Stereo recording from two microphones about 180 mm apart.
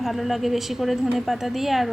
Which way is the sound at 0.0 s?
Centre (ahead or behind).